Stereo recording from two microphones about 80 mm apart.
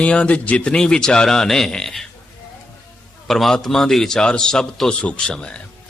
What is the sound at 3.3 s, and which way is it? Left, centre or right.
A man's voice, centre.